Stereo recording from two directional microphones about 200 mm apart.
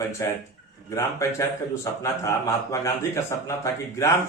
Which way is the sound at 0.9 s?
15° left (ahead or behind).